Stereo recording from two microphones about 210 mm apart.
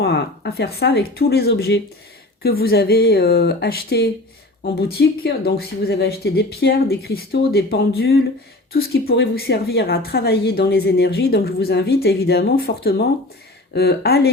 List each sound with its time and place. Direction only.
0.0 s a woman's voice: 50° left (ahead or behind)